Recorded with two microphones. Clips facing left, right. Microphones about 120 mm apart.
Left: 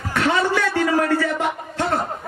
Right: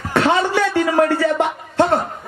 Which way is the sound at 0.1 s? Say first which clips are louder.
Right 3 dB; 30° right (ahead or behind).